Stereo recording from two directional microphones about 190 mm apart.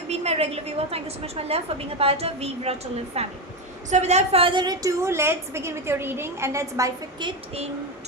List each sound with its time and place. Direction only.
0.1 s a woman's voice: 35° right (ahead or behind)